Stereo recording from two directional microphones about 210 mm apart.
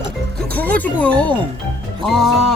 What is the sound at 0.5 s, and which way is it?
Speech, 10° left (ahead or behind).